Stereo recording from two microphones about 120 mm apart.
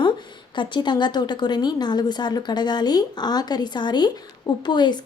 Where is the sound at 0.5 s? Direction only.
40° left (ahead or behind).